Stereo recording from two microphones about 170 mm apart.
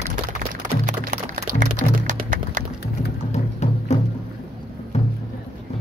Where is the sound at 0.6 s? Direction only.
50° right (ahead or behind).